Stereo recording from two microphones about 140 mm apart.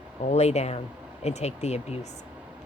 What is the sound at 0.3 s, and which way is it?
A woman's voice, 50° left (ahead or behind).